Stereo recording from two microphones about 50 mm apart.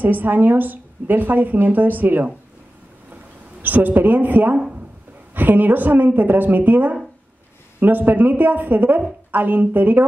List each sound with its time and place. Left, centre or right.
0.0 s speech: right
3.6 s speech: right